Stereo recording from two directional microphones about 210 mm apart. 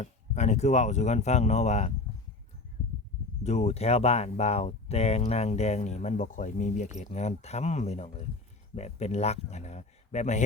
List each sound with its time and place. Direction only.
0.0 s speech: 35° left (ahead or behind)
3.4 s speech: 30° left (ahead or behind)